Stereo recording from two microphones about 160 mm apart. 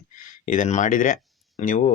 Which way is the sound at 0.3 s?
50° left (ahead or behind).